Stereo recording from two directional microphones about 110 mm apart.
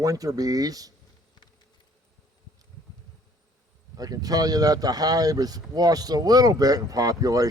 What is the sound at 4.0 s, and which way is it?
Speech, 35° right (ahead or behind).